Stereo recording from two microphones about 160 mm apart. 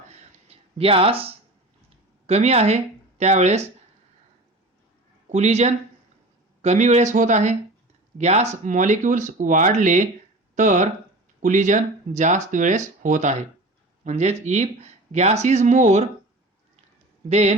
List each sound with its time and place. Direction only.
0.1 s a sound: 40° right (ahead or behind)
2.2 s speech: 40° right (ahead or behind)
5.3 s speech: 45° right (ahead or behind)
17.2 s speech: 45° right (ahead or behind)